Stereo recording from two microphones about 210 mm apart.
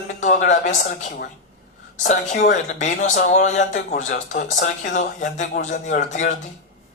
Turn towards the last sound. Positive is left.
turn(degrees=40)  # may be behind; listen again after turning